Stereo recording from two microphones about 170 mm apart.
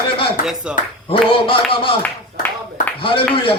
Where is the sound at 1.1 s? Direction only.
30° left (ahead or behind).